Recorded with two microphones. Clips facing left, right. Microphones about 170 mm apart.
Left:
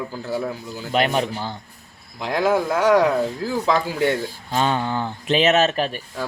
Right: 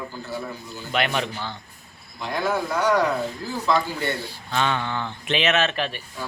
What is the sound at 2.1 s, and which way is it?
A man's voice, 90° left.